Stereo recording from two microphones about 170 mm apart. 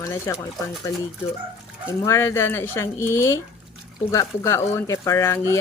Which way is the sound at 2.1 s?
15° left (ahead or behind).